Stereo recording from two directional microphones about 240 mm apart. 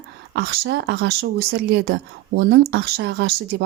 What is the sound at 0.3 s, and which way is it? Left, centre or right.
Speech, right.